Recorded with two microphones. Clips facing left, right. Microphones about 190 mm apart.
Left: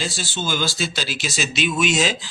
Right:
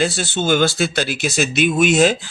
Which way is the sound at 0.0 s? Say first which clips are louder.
Right 8 dB; 60° right (ahead or behind).